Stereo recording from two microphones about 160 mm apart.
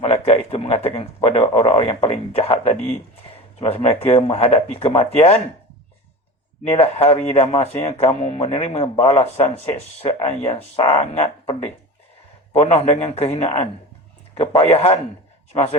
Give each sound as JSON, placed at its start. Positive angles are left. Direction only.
{"t": 0.0, "sound": "a man's voice", "side_deg": 35}
{"t": 6.7, "sound": "speech", "side_deg": 40}